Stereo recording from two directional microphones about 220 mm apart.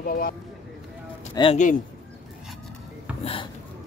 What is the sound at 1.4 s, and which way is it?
Speech, 20° left (ahead or behind).